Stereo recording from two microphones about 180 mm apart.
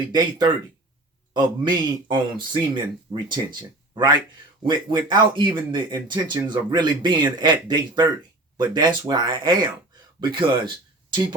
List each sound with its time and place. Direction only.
0.1 s speech: 25° right (ahead or behind)